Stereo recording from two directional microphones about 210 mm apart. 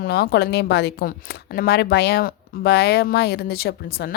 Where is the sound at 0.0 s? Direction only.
50° left (ahead or behind).